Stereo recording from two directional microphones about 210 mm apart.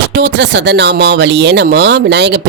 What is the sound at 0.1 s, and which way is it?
Speech, 55° right (ahead or behind).